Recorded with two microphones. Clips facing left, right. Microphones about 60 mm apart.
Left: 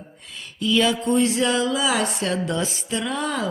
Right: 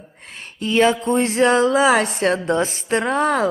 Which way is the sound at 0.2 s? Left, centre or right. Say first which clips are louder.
Even; right.